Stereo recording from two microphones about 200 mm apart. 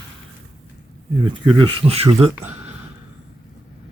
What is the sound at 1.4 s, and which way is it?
Speech, 25° right (ahead or behind).